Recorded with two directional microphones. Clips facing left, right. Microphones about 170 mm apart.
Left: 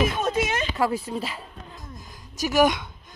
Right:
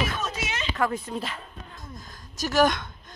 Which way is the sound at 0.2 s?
55° left (ahead or behind).